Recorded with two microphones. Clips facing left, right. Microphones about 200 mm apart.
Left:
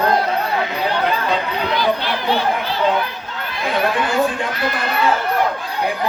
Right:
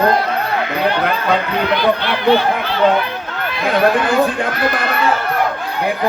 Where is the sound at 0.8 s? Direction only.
60° right (ahead or behind).